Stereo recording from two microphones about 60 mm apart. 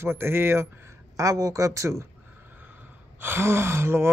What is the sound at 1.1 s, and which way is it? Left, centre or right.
Speech, right.